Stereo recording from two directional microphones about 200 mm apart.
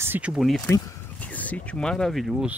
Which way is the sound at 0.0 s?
10° right (ahead or behind).